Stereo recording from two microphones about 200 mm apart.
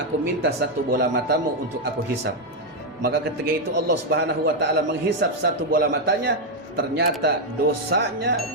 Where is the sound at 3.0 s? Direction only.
55° right (ahead or behind).